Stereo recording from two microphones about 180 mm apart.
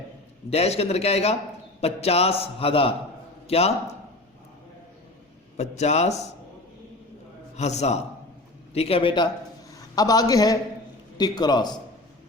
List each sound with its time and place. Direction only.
0.5 s a man's voice: 35° left (ahead or behind)
5.5 s a man's voice: 40° left (ahead or behind)
7.5 s a man's voice: 40° left (ahead or behind)